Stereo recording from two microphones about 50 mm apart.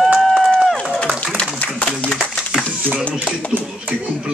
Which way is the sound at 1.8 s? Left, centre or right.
Left.